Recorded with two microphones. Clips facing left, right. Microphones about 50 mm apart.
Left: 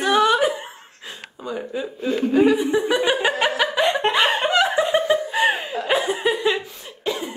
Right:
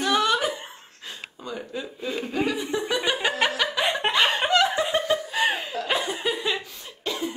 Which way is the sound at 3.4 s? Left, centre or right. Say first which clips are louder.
Left 4 dB; centre.